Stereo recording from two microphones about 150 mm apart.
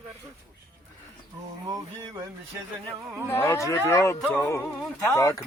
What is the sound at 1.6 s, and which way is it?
Speech, 25° right (ahead or behind).